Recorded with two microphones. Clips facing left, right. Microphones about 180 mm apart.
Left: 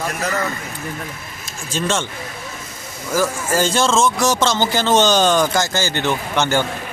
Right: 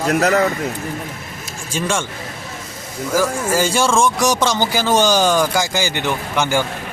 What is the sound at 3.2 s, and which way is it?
Speech, 10° right (ahead or behind).